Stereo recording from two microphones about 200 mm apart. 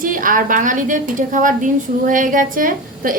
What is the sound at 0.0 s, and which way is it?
A woman's voice, 45° right (ahead or behind).